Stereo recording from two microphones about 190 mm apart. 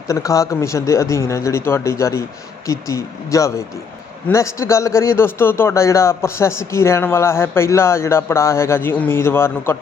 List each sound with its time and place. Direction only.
0.1 s a man's voice: 15° left (ahead or behind)